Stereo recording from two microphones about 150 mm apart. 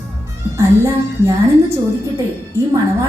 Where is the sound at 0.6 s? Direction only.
15° right (ahead or behind).